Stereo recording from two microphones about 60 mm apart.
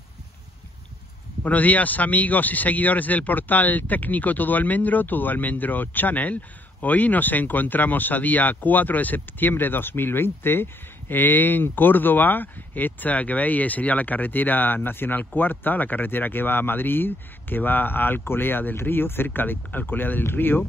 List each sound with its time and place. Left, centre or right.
1.4 s speech: left